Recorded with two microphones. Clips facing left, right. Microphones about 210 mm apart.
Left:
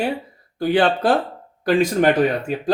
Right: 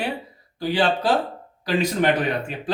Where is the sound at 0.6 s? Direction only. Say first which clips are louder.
Left 4 dB; 55° left (ahead or behind).